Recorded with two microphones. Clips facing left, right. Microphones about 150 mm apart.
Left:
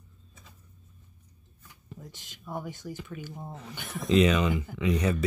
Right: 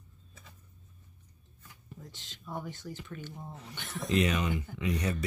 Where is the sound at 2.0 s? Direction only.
10° left (ahead or behind).